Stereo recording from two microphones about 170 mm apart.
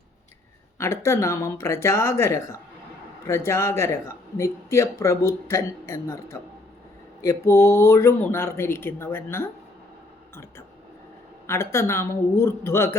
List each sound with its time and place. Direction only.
0.8 s speech: 15° left (ahead or behind)
11.4 s speech: 15° left (ahead or behind)